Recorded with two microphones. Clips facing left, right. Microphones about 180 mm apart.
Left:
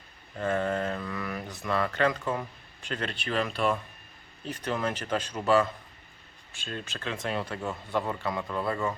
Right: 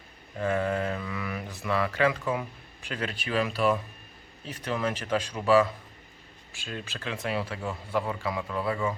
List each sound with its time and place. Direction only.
0.6 s speech: 5° right (ahead or behind)